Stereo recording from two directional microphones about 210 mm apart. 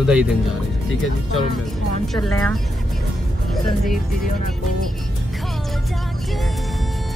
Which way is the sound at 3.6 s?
Centre (ahead or behind).